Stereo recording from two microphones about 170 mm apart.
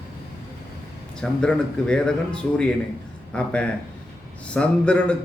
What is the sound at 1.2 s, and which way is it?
A man's voice, 5° left (ahead or behind).